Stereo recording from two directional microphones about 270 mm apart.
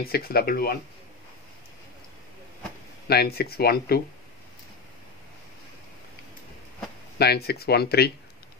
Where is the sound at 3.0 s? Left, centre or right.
Left.